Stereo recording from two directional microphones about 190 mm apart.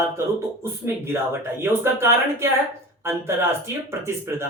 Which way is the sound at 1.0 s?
15° right (ahead or behind).